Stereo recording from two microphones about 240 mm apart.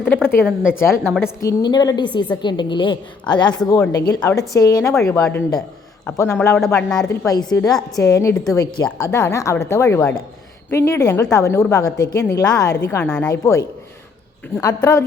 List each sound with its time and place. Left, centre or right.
0.0 s speech: centre
0.4 s a woman's voice: centre
1.4 s a woman's voice: centre
7.3 s speech: centre